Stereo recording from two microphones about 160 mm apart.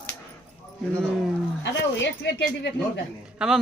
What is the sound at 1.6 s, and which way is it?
Speech, 90° left.